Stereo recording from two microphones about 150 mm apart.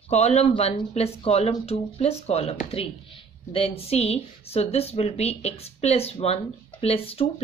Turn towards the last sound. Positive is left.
turn(degrees=40)  # may be behind; listen again after turning